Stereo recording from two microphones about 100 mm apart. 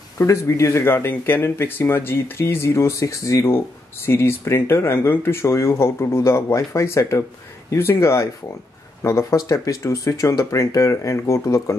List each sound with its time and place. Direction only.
0.2 s speech: 30° left (ahead or behind)